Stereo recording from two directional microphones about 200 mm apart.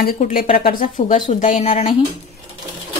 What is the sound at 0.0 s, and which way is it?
A woman's voice, 45° left (ahead or behind).